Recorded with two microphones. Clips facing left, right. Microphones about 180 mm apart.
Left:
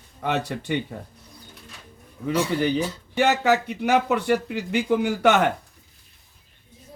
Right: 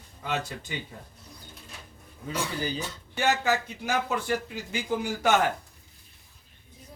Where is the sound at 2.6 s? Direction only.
65° left (ahead or behind).